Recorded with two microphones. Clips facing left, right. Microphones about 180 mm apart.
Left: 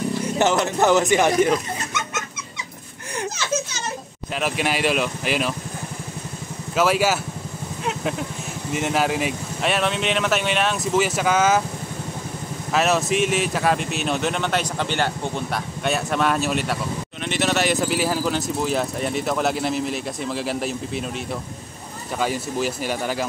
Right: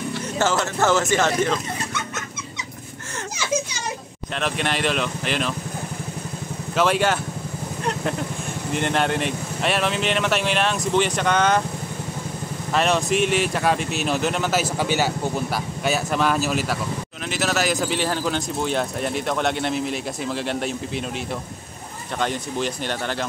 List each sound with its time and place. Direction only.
0.2 s speech: 20° left (ahead or behind)
3.3 s a sound: 10° right (ahead or behind)
4.4 s speech: 5° left (ahead or behind)
6.7 s speech: 5° left (ahead or behind)
12.7 s speech: 5° left (ahead or behind)
22.2 s speech: 5° left (ahead or behind)